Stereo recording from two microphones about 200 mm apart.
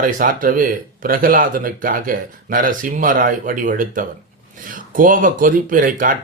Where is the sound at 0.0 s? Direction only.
45° right (ahead or behind).